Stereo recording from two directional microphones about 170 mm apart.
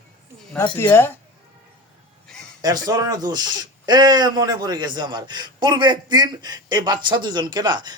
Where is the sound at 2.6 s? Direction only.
20° right (ahead or behind).